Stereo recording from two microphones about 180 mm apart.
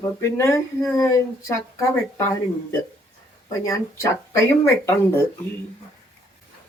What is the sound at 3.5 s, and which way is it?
Speech, 15° left (ahead or behind).